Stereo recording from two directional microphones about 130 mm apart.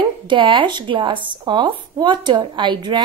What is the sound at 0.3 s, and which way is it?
Speech, 40° right (ahead or behind).